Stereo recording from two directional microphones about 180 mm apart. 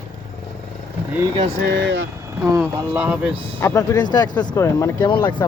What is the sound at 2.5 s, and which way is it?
Speech, 10° right (ahead or behind).